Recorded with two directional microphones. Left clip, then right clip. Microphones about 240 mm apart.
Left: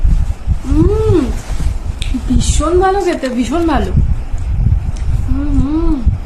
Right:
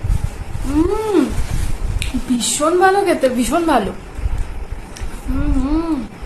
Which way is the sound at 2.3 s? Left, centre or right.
Centre.